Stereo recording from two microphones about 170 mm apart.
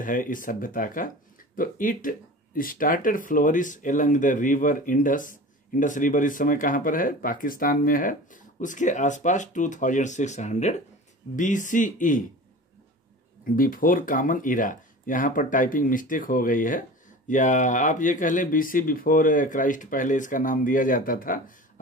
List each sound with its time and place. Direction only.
0.0 s speech: 50° left (ahead or behind)
13.6 s speech: 55° left (ahead or behind)